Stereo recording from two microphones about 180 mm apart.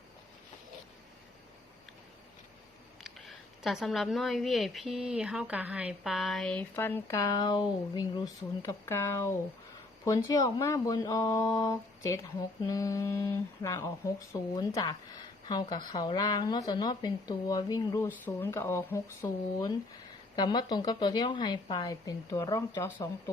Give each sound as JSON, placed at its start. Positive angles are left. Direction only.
{"t": 3.0, "sound": "a woman's voice", "side_deg": 0}